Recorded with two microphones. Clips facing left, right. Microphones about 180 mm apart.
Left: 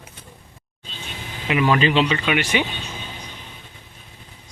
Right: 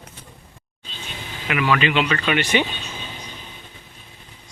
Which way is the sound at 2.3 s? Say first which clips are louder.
Right 1 dB; 5° left (ahead or behind).